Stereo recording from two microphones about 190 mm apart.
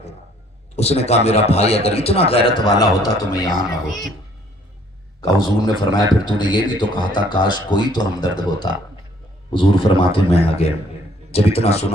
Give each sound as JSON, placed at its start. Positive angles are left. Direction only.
{"t": 0.8, "sound": "a man's voice", "side_deg": 35}
{"t": 5.4, "sound": "a man's voice", "side_deg": 20}